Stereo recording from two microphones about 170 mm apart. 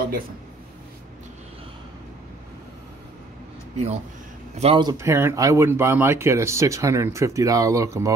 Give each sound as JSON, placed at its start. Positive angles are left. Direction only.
{"t": 3.7, "sound": "speech", "side_deg": -40}
{"t": 4.8, "sound": "speech", "side_deg": -15}